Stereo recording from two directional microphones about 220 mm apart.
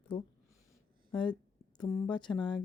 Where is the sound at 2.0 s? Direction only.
20° left (ahead or behind).